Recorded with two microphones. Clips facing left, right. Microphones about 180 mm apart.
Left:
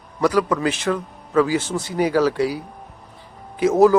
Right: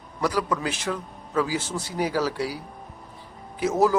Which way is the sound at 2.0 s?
60° left (ahead or behind).